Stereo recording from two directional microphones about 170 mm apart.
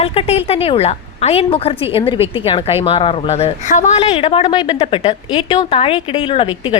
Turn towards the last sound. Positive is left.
turn(degrees=30)  # may be behind; listen again after turning